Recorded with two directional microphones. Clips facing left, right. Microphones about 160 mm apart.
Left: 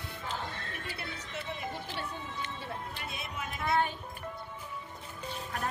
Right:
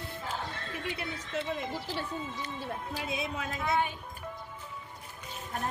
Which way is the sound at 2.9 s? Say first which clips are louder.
Right 6 dB; 90° right.